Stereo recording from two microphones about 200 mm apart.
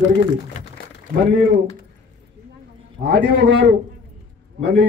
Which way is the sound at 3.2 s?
45° right (ahead or behind).